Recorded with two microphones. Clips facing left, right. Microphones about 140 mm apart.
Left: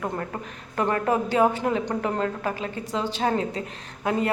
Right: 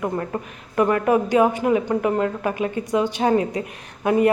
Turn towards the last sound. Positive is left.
turn(degrees=-20)  # may be behind; listen again after turning